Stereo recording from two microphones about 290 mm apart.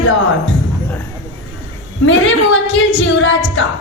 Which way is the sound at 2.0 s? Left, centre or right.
Left.